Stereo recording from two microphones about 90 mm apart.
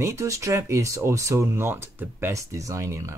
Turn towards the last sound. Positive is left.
turn(degrees=-35)  # may be behind; listen again after turning